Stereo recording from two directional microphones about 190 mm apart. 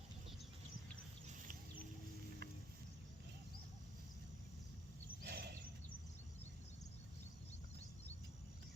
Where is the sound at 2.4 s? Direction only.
55° right (ahead or behind).